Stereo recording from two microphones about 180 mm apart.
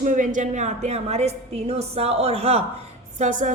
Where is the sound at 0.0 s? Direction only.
45° right (ahead or behind).